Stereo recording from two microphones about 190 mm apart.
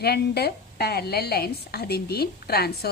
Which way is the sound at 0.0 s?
55° left (ahead or behind).